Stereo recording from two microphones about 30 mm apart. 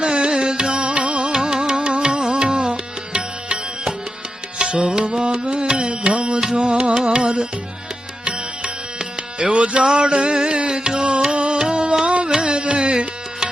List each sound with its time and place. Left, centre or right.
0.0 s music: right
1.3 s music: right